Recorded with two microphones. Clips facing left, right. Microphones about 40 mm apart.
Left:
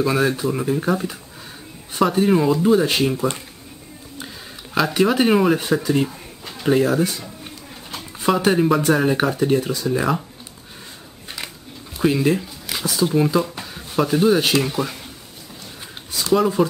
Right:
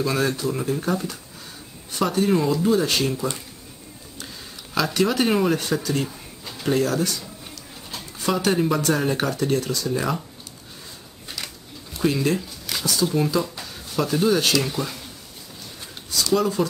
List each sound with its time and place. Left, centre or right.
0.0 s speech: centre
2.0 s speech: centre
3.2 s speech: left
4.7 s speech: centre
11.2 s a sound: left
12.0 s speech: centre
16.1 s speech: left